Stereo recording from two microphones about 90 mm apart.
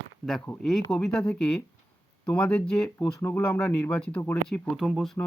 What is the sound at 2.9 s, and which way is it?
Speech, 25° left (ahead or behind).